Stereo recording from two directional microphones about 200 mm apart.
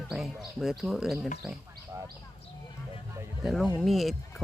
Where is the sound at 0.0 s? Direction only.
Centre (ahead or behind).